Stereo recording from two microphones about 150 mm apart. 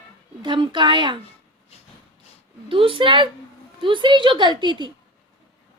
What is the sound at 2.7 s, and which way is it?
A woman's voice, 35° right (ahead or behind).